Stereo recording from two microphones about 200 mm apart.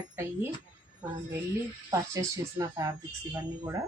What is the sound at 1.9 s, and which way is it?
A woman's voice, 15° right (ahead or behind).